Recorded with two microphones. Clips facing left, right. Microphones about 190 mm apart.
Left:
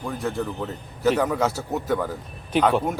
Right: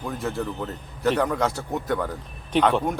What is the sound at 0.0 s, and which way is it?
A man's voice, centre (ahead or behind).